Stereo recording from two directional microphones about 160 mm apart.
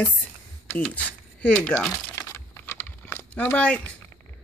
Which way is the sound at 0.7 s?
10° left (ahead or behind).